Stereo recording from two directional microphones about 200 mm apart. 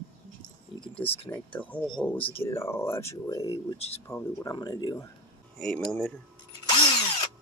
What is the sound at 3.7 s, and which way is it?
Speech, 30° left (ahead or behind).